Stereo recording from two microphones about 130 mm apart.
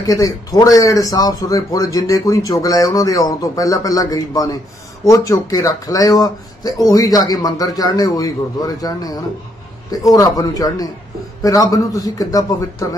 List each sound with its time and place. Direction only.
0.0 s speech: 25° left (ahead or behind)